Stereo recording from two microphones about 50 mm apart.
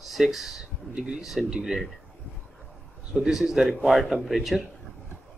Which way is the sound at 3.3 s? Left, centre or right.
Centre.